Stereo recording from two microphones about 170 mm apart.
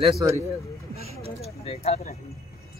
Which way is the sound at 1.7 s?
40° left (ahead or behind).